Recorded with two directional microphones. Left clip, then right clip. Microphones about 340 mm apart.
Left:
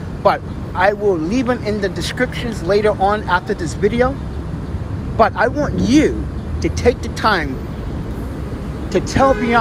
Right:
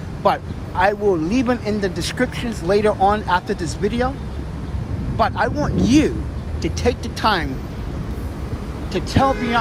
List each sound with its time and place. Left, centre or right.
0.2 s speech: centre
5.1 s speech: centre
8.9 s speech: centre